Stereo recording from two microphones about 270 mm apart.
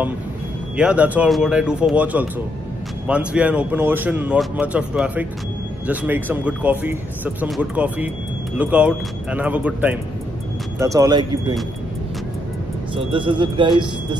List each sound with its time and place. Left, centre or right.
0.7 s speech: centre
12.9 s speech: centre